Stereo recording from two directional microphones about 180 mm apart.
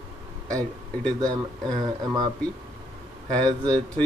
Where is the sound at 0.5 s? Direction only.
5° left (ahead or behind).